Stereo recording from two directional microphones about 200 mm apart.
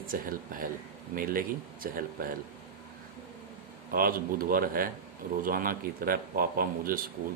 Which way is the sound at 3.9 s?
45° right (ahead or behind).